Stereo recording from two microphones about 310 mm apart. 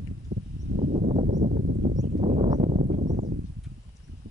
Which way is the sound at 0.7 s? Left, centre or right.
Right.